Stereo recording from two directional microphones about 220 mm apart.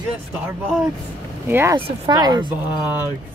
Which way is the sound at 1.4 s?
10° right (ahead or behind).